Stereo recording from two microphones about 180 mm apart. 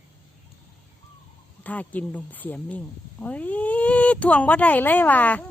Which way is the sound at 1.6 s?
10° left (ahead or behind).